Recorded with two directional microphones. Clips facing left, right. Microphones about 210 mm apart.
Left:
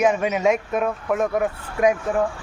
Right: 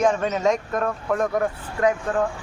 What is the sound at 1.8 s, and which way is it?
Speech, 15° left (ahead or behind).